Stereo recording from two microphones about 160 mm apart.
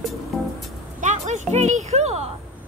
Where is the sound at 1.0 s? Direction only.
45° right (ahead or behind).